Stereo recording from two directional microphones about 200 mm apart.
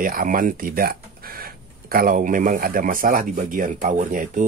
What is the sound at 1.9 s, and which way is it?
Speech, 45° right (ahead or behind).